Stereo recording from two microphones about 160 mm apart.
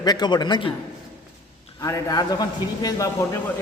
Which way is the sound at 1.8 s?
20° left (ahead or behind).